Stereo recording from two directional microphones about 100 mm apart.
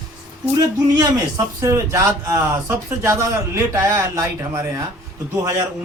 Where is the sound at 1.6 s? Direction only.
30° right (ahead or behind).